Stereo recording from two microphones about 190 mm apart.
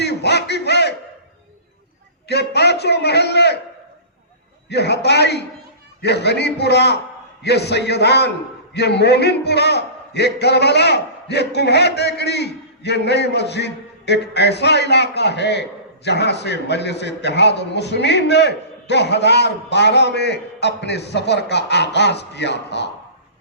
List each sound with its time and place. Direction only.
0.0 s a sound: 60° left (ahead or behind)
2.2 s a man's voice: 60° left (ahead or behind)
4.7 s a man's voice: 60° left (ahead or behind)